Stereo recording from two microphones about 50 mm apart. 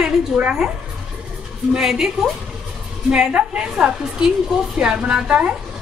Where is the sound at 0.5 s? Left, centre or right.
Centre.